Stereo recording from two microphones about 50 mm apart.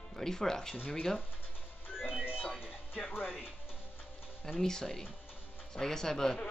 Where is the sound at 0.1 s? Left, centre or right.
Centre.